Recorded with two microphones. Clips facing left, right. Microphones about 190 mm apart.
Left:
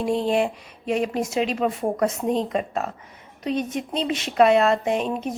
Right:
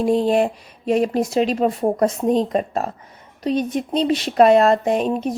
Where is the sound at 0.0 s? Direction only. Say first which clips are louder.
Right 5 dB; 40° right (ahead or behind).